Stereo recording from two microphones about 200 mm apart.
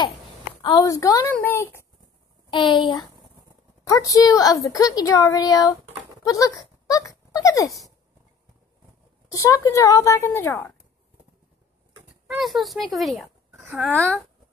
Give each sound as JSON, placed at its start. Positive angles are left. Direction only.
{"t": 0.6, "sound": "a woman's voice", "side_deg": 20}
{"t": 2.5, "sound": "a woman's voice", "side_deg": 25}
{"t": 9.3, "sound": "a woman's voice", "side_deg": 15}
{"t": 12.4, "sound": "a woman's voice", "side_deg": 0}